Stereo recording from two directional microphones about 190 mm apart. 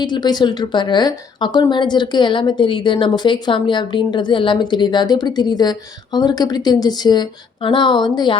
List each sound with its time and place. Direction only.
0.0 s a woman's voice: 20° left (ahead or behind)